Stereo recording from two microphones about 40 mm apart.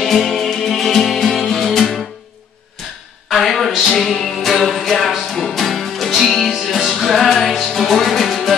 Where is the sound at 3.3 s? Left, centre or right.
Centre.